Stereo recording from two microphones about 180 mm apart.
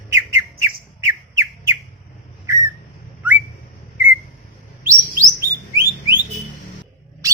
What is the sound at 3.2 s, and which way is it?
Whistling, 10° right (ahead or behind).